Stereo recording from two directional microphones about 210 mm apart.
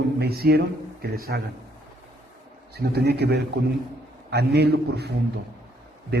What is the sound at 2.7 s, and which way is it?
A man's voice, 50° right (ahead or behind).